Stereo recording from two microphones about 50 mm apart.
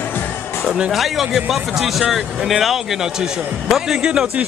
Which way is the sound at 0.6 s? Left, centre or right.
Centre.